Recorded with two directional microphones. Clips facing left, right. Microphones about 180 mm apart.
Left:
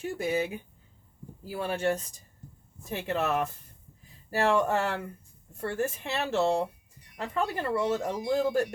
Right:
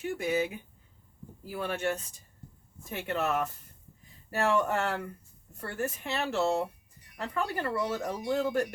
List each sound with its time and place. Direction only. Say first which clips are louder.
0.2 s speech: left 1 dB; 30° left (ahead or behind)
1.5 s speech: left 3 dB; 30° left (ahead or behind)